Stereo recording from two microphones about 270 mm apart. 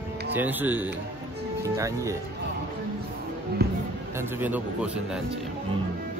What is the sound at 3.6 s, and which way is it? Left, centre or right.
Music, right.